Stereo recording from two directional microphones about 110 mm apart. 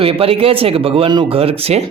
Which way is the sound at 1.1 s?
45° right (ahead or behind).